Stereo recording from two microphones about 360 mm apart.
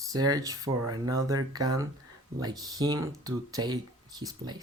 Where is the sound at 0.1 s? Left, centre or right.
Centre.